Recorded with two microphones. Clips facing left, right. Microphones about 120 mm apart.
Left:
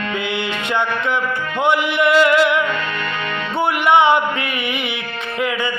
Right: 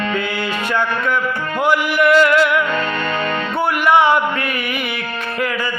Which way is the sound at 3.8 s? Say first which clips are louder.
Even; 25° left (ahead or behind).